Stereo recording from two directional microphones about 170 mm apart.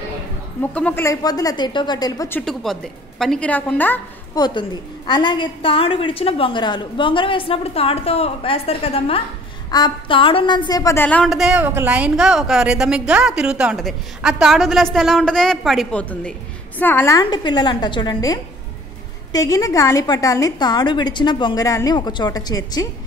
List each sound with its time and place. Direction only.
0.6 s a woman's voice: 10° left (ahead or behind)
2.4 s a woman's voice: centre (ahead or behind)
4.4 s a woman's voice: 25° left (ahead or behind)